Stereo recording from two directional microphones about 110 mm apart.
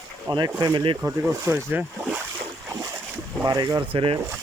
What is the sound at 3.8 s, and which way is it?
Speech, 50° right (ahead or behind).